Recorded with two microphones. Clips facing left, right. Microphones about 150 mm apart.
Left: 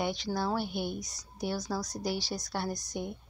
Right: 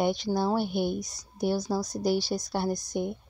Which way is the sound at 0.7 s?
50° right (ahead or behind).